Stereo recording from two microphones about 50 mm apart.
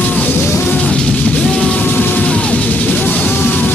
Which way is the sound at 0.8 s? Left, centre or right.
Centre.